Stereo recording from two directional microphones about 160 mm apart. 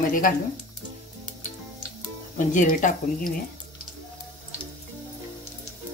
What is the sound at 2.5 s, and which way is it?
Speech, 55° left (ahead or behind).